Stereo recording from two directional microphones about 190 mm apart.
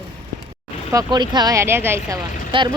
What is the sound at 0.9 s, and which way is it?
A woman's voice, 20° right (ahead or behind).